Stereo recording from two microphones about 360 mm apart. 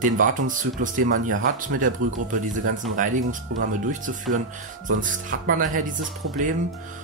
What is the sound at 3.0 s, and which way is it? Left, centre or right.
Speech, right.